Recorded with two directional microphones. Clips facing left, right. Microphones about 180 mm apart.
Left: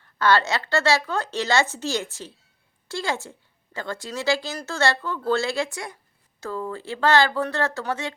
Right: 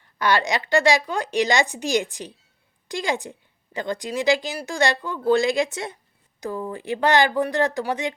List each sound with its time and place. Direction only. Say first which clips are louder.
0.0 s a woman's voice: left 1 dB; 15° right (ahead or behind)